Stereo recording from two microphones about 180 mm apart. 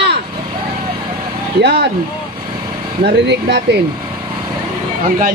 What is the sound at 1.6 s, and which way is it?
Speech, 65° right (ahead or behind).